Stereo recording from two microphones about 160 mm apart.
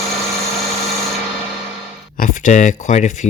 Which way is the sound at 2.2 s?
55° left (ahead or behind).